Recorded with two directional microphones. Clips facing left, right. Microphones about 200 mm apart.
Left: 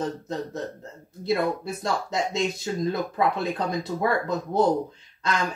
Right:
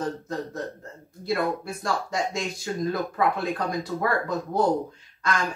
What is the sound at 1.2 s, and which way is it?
Speech, 20° left (ahead or behind).